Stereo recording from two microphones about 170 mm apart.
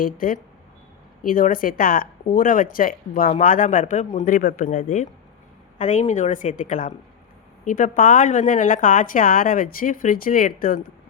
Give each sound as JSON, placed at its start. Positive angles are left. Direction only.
{"t": 0.0, "sound": "speech", "side_deg": 55}
{"t": 4.3, "sound": "speech", "side_deg": 60}